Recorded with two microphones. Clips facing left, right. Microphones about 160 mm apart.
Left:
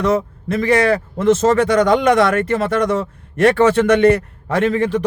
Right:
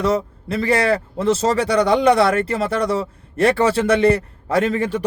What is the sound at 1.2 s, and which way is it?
A man's voice, 35° right (ahead or behind).